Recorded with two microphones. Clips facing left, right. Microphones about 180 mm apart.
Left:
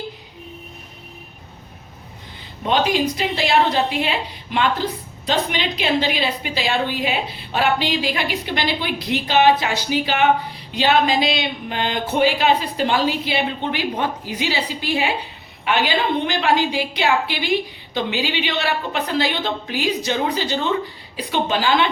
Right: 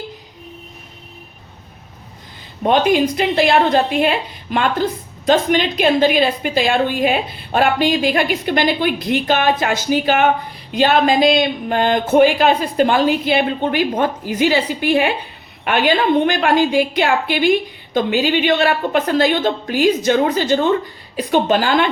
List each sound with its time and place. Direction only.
2.6 s a woman's voice: 55° right (ahead or behind)